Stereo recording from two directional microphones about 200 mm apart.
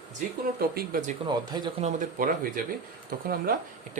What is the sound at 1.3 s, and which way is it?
Speech, 20° right (ahead or behind).